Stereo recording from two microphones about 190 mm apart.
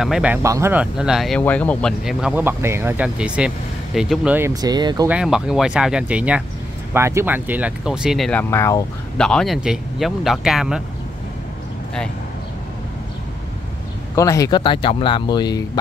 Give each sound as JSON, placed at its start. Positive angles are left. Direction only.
{"t": 0.0, "sound": "speech", "side_deg": -5}
{"t": 4.6, "sound": "speech", "side_deg": -20}
{"t": 5.0, "sound": "speech", "side_deg": -5}
{"t": 9.2, "sound": "speech", "side_deg": 5}
{"t": 14.1, "sound": "speech", "side_deg": 15}